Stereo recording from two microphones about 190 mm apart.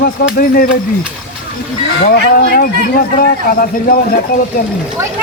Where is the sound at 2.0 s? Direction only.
55° left (ahead or behind).